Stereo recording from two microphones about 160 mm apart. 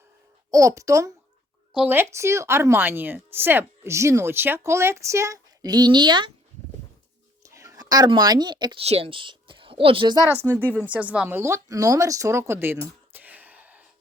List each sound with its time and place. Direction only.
0.5 s a child's voice: 20° right (ahead or behind)
7.4 s speech: 20° right (ahead or behind)
8.8 s a woman's voice: 40° right (ahead or behind)
10.2 s speech: 15° right (ahead or behind)